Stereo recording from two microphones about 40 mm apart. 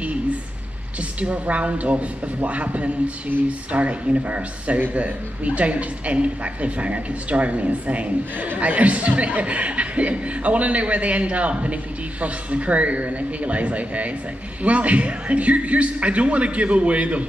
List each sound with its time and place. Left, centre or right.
1.2 s speech: right